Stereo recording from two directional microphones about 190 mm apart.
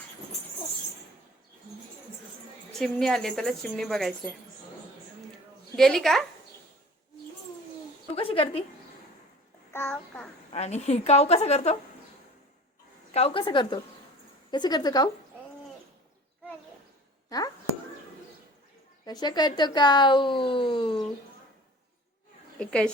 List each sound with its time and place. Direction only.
2.7 s a woman's voice: centre (ahead or behind)
5.7 s a woman's voice: centre (ahead or behind)
8.1 s a sound: 30° left (ahead or behind)
9.7 s a child's voice: 10° left (ahead or behind)
10.5 s a woman's voice: 35° left (ahead or behind)
13.1 s speech: 30° left (ahead or behind)
17.2 s a sound: 20° left (ahead or behind)
19.0 s speech: 20° left (ahead or behind)
22.5 s a woman's voice: 5° left (ahead or behind)